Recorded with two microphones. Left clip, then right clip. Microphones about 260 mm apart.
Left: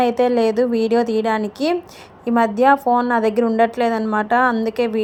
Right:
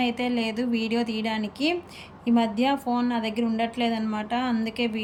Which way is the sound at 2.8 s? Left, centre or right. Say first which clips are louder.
Left 11 dB; left.